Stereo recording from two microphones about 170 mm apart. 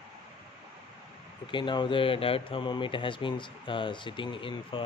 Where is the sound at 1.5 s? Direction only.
25° left (ahead or behind).